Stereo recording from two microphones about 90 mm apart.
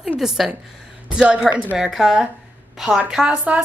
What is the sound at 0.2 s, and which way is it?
A woman's voice, 5° right (ahead or behind).